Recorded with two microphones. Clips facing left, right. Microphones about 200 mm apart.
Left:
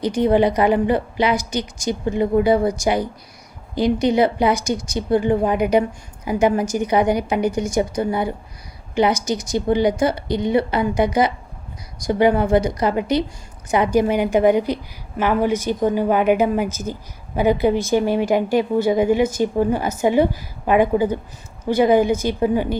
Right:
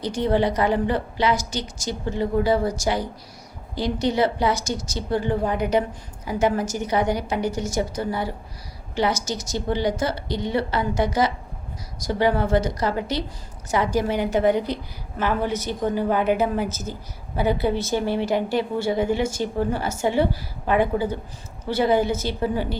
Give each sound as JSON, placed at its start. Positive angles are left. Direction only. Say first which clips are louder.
{"t": 0.2, "sound": "a woman's voice", "louder": "left 5 dB", "side_deg": 15}
{"t": 4.0, "sound": "a woman's voice", "louder": "left 2 dB", "side_deg": 15}